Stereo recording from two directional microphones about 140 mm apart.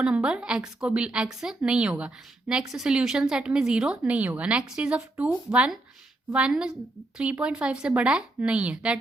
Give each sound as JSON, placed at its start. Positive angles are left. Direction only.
{"t": 0.0, "sound": "a woman's voice", "side_deg": -5}